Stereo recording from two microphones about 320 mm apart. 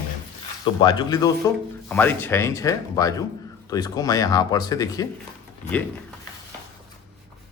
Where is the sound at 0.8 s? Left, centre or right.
Centre.